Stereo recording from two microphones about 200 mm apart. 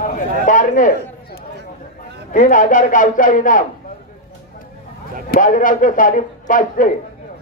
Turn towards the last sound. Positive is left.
turn(degrees=40)  # may be behind; listen again after turning